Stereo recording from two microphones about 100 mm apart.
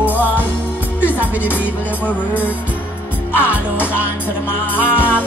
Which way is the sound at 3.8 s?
20° left (ahead or behind).